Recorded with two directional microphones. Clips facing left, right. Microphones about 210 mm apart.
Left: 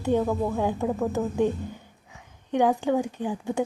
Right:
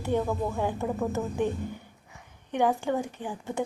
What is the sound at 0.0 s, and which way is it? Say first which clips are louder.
Speech: left 4 dB; 15° left (ahead or behind).